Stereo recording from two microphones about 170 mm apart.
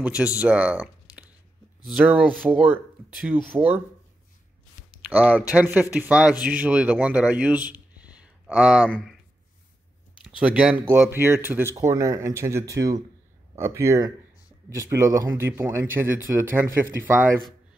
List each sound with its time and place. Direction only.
0.0 s speech: 5° right (ahead or behind)
1.9 s speech: 5° right (ahead or behind)
5.1 s speech: 10° right (ahead or behind)
10.1 s speech: 5° right (ahead or behind)